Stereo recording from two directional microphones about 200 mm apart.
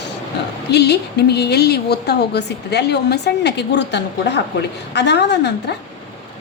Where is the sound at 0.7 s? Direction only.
55° left (ahead or behind).